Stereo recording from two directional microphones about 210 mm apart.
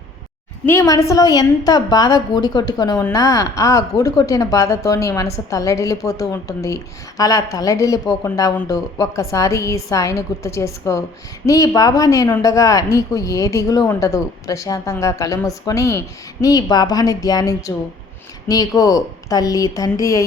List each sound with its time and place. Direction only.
0.6 s a woman's voice: 15° left (ahead or behind)